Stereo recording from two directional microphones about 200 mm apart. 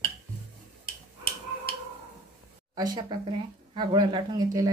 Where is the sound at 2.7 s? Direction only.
20° right (ahead or behind).